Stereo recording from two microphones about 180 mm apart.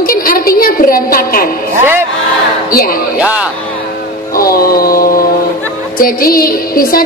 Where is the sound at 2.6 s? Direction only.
55° left (ahead or behind).